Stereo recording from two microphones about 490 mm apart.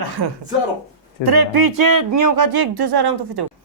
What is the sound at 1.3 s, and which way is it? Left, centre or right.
Speech, right.